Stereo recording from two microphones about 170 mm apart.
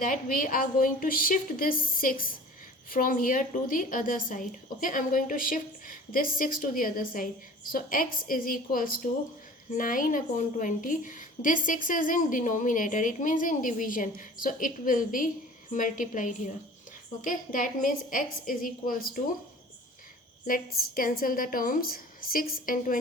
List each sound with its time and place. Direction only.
0.0 s a woman's voice: 55° left (ahead or behind)
20.5 s a woman's voice: 55° left (ahead or behind)